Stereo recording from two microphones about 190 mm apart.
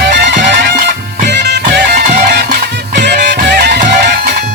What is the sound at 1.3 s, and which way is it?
Music, 65° right (ahead or behind).